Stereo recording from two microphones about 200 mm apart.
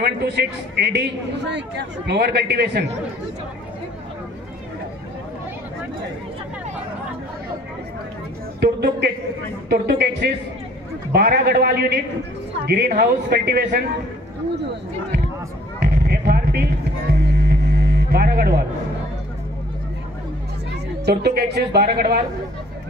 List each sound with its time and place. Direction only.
0.2 s a man's voice: 55° right (ahead or behind)
8.5 s a man's voice: 55° right (ahead or behind)
15.8 s music: 50° right (ahead or behind)
21.0 s a woman's voice: 55° right (ahead or behind)